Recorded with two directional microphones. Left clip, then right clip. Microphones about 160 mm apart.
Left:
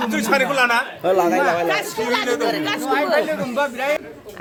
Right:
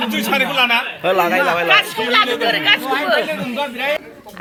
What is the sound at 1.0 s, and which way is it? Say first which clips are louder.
Speech: right 1 dB; centre (ahead or behind).